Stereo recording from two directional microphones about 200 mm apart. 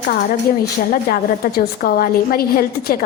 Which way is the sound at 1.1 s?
50° left (ahead or behind).